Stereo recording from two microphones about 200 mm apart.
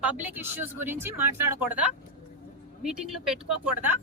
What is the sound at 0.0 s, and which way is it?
Speech, 10° right (ahead or behind).